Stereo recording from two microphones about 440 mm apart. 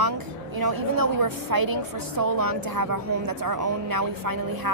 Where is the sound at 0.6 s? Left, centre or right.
Right.